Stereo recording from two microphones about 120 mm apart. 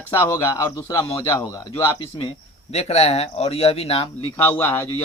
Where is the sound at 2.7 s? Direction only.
60° left (ahead or behind).